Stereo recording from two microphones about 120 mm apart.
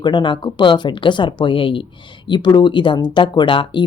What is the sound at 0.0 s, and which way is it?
A woman's voice, 40° left (ahead or behind).